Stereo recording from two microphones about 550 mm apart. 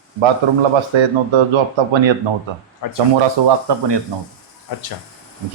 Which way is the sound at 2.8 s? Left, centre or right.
Left.